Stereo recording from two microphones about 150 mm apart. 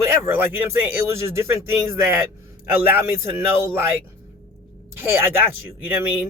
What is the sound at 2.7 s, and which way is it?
Speech, 15° right (ahead or behind).